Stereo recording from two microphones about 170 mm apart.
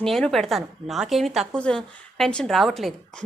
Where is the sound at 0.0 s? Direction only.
Centre (ahead or behind).